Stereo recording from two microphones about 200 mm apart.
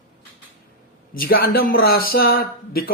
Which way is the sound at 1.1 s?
45° left (ahead or behind).